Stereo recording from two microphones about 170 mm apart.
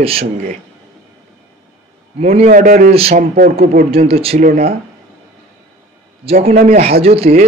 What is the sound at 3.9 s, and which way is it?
Speech, 35° right (ahead or behind).